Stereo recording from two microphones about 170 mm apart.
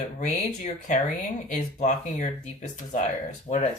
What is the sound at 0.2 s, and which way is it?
Speech, 45° left (ahead or behind).